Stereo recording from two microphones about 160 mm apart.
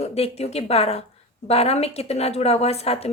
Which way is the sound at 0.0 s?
40° left (ahead or behind).